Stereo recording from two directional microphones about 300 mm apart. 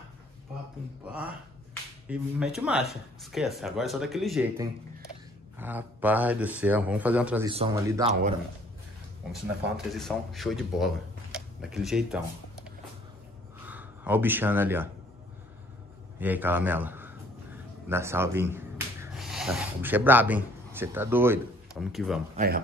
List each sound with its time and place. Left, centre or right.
1.0 s speech: centre
5.6 s speech: centre
9.9 s speech: centre
13.7 s speech: centre
16.2 s a man's voice: centre
22.3 s speech: right